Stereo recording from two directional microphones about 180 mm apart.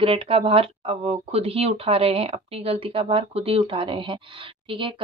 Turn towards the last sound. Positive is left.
turn(degrees=-30)  # may be behind; listen again after turning